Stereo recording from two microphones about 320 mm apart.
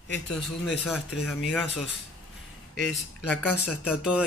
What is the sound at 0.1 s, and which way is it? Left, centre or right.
Speech, centre.